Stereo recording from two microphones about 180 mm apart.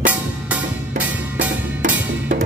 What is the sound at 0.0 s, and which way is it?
Music, 10° right (ahead or behind).